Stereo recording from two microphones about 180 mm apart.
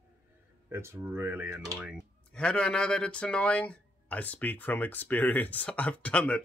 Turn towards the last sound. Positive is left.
turn(degrees=5)  # may be behind; listen again after turning